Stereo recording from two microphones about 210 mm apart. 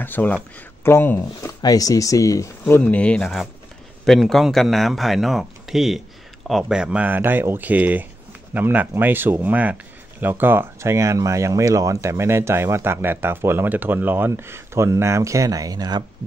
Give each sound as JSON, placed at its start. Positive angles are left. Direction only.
{"t": 0.0, "sound": "speech", "side_deg": 10}